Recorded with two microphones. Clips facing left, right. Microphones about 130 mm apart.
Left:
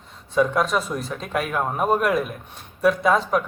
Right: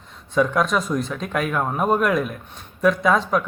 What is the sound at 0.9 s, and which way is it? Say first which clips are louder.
Speech: right 2 dB; 40° left (ahead or behind).